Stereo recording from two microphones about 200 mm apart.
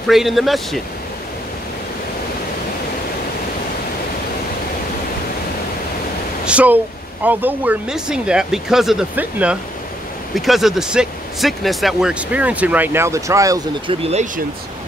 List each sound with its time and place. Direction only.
0.0 s speech: centre (ahead or behind)
6.4 s a sound: 5° right (ahead or behind)
7.2 s speech: 10° right (ahead or behind)
14.0 s speech: 35° right (ahead or behind)